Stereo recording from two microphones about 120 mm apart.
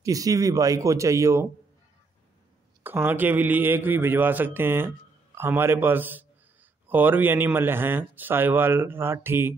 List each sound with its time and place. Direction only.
0.0 s speech: 30° right (ahead or behind)
2.8 s a man's voice: 20° right (ahead or behind)